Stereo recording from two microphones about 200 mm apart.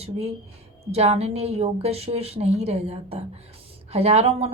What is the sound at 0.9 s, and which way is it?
Speech, 30° right (ahead or behind).